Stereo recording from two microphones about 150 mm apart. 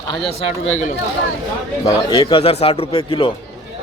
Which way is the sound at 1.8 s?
35° left (ahead or behind).